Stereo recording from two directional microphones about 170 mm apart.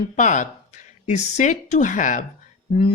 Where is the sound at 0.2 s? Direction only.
45° left (ahead or behind).